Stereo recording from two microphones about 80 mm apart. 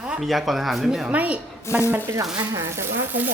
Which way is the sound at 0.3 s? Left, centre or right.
Centre.